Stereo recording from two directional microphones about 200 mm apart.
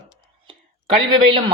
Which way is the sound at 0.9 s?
25° right (ahead or behind).